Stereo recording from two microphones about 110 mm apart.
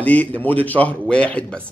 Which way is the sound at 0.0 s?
15° left (ahead or behind).